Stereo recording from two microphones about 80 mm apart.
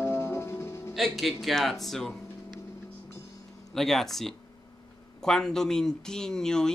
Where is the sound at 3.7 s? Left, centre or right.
Centre.